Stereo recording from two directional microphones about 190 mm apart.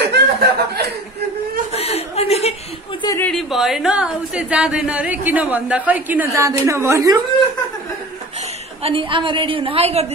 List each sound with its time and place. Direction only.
0.1 s chuckle: 60° right (ahead or behind)
1.7 s chuckle: 30° left (ahead or behind)
3.0 s a sound: 20° left (ahead or behind)
3.3 s speech: centre (ahead or behind); by 7.2 s 15° right (ahead or behind)
8.4 s a woman's voice: 30° right (ahead or behind)